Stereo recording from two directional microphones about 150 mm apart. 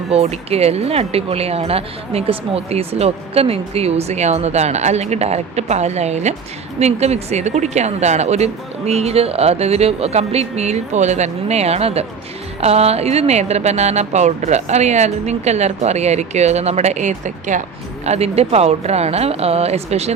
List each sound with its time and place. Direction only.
0.1 s speech: 45° right (ahead or behind)